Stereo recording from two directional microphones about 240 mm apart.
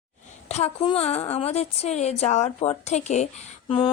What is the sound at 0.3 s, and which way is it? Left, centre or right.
A woman's voice, left.